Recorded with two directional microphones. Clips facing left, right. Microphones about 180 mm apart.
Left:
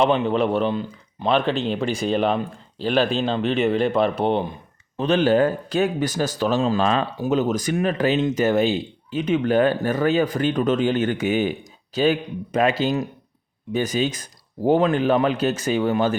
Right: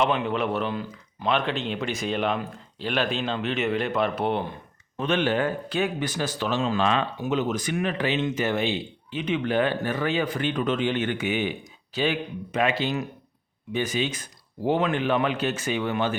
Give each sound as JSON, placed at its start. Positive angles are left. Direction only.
{"t": 0.0, "sound": "speech", "side_deg": 30}